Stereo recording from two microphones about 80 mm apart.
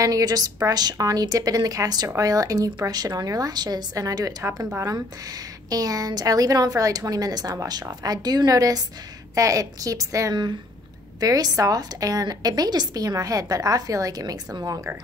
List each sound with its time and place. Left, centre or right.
0.0 s a woman's voice: right
5.7 s a woman's voice: right